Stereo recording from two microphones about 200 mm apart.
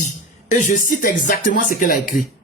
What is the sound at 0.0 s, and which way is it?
Speech, 40° left (ahead or behind).